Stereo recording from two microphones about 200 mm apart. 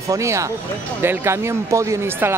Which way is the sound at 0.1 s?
15° right (ahead or behind).